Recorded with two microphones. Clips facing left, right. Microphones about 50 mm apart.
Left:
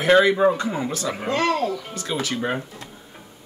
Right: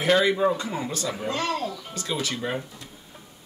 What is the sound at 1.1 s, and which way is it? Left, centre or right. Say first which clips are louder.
Speech: left 7 dB; left.